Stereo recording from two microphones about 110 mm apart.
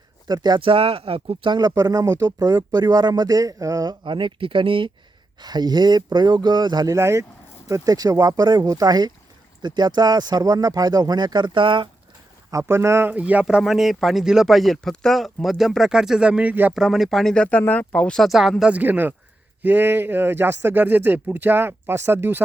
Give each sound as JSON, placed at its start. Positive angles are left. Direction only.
{"t": 0.3, "sound": "speech", "side_deg": -40}
{"t": 4.0, "sound": "speech", "side_deg": -45}
{"t": 5.4, "sound": "speech", "side_deg": -40}
{"t": 12.5, "sound": "speech", "side_deg": -25}
{"t": 16.7, "sound": "speech", "side_deg": -5}
{"t": 18.7, "sound": "speech", "side_deg": -15}